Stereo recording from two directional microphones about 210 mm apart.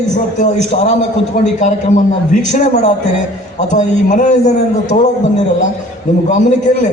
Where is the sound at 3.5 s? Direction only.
35° left (ahead or behind).